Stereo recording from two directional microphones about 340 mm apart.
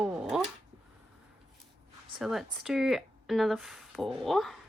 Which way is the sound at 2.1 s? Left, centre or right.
Centre.